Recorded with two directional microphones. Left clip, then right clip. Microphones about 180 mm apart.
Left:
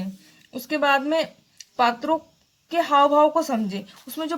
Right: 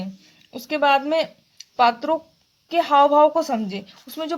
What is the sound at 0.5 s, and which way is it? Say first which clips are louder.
Speech: right 2 dB; 15° right (ahead or behind).